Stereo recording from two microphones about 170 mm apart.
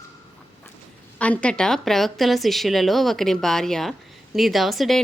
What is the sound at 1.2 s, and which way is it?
A woman's voice, 5° left (ahead or behind).